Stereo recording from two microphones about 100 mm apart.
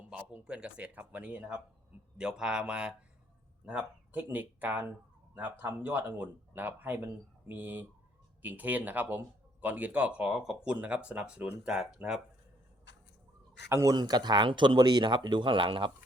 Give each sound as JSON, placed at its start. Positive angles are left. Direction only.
{"t": 0.1, "sound": "speech", "side_deg": -15}
{"t": 13.7, "sound": "speech", "side_deg": -25}
{"t": 13.9, "sound": "speech", "side_deg": -45}